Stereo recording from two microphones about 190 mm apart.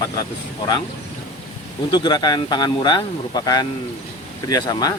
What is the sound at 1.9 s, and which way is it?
Speech, 20° left (ahead or behind).